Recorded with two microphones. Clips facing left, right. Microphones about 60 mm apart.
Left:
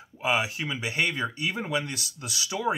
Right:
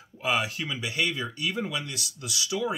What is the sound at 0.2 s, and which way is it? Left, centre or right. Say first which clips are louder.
Speech: left 1 dB; centre.